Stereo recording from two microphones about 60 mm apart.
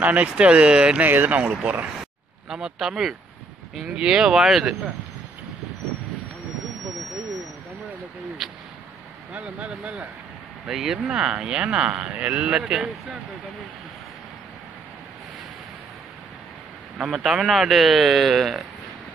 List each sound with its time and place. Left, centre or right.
0.0 s speech: right
1.0 s speech: right
2.5 s speech: centre
8.4 s a sound: centre
10.7 s speech: centre
17.0 s speech: centre